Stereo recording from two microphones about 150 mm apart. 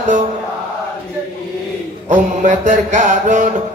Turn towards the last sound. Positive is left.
turn(degrees=-55)  # may be behind; listen again after turning